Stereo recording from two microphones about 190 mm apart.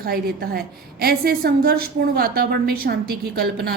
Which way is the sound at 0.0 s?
55° right (ahead or behind).